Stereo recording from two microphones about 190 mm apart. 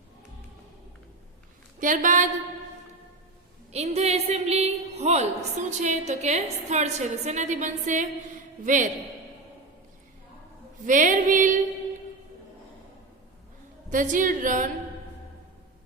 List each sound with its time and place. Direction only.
1.8 s a woman's voice: 45° right (ahead or behind)
3.7 s a woman's voice: 35° right (ahead or behind)
10.8 s a woman's voice: 45° right (ahead or behind)
13.9 s a woman's voice: 45° right (ahead or behind)